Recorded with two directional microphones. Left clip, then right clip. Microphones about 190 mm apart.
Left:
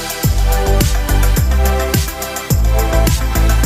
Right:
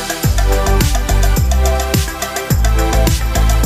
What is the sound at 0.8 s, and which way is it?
Music, centre (ahead or behind).